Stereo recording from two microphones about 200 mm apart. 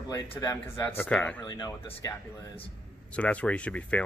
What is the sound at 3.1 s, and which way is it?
Speech, 5° left (ahead or behind).